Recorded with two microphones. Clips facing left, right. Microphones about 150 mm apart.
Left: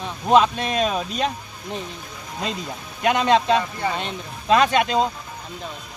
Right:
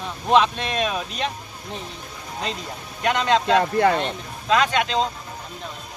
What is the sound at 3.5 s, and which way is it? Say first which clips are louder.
Speech: right 6 dB; 75° right (ahead or behind).